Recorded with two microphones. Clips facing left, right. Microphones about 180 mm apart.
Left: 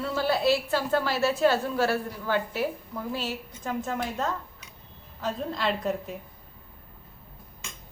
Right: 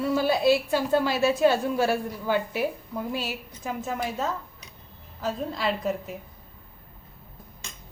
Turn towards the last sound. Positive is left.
turn(degrees=0)  # may be behind; listen again after turning